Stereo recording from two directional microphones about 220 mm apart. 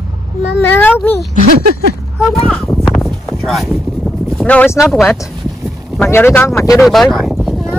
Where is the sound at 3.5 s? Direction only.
Centre (ahead or behind).